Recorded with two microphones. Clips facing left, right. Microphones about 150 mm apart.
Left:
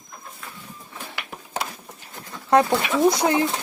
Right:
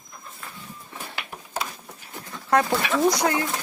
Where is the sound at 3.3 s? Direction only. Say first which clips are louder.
Left 5 dB; 25° left (ahead or behind).